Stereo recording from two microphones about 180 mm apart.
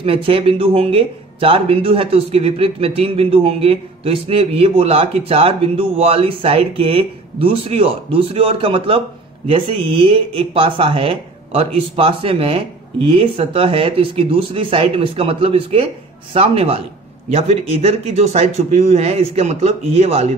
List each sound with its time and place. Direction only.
0.0 s speech: 30° right (ahead or behind)